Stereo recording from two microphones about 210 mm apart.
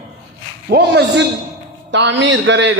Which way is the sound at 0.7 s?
55° right (ahead or behind).